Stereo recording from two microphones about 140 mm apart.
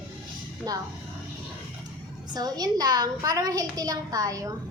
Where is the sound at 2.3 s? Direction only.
30° right (ahead or behind).